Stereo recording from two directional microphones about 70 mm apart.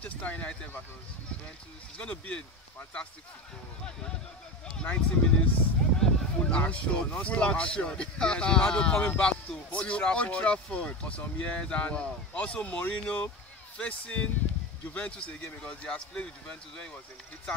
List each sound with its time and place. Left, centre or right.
0.0 s speech: left
2.0 s speech: centre
4.6 s speech: centre